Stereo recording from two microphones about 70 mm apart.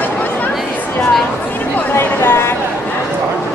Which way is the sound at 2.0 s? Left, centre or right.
Left.